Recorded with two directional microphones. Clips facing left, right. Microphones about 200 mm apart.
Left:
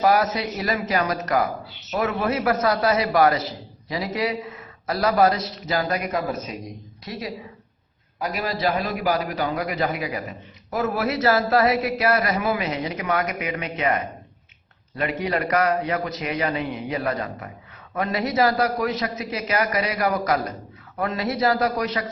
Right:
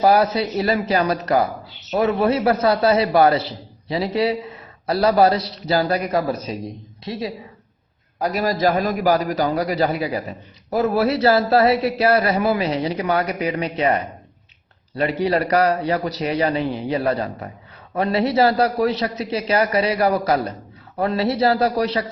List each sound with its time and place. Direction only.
0.0 s a man's voice: 30° right (ahead or behind)
8.2 s a man's voice: 40° right (ahead or behind)
15.2 s a man's voice: 35° right (ahead or behind)